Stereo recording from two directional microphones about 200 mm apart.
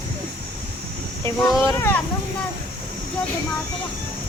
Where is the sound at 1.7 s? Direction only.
15° left (ahead or behind).